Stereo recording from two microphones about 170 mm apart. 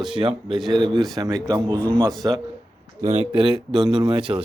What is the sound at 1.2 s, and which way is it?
Speech, 25° right (ahead or behind).